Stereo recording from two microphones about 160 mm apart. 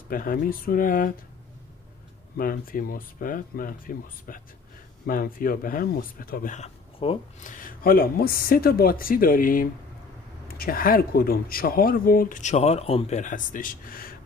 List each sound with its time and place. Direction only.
0.1 s speech: 60° left (ahead or behind)
2.3 s speech: 65° left (ahead or behind)
7.0 s speech: 35° left (ahead or behind)
7.4 s speech: 60° left (ahead or behind)